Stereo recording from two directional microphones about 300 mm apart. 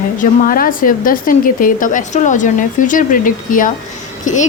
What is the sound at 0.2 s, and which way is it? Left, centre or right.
Speech, left.